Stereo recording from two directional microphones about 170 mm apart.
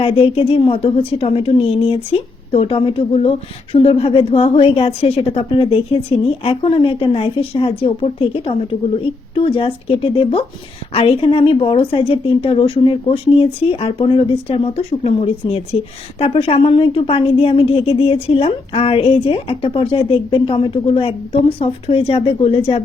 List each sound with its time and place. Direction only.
0.0 s a woman's voice: 35° left (ahead or behind)